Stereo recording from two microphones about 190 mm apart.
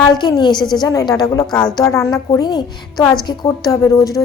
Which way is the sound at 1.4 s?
5° left (ahead or behind).